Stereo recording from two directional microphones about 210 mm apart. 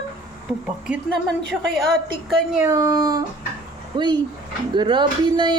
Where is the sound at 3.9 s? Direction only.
20° right (ahead or behind).